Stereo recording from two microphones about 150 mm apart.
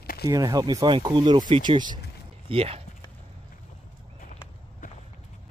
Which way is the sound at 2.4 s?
40° right (ahead or behind).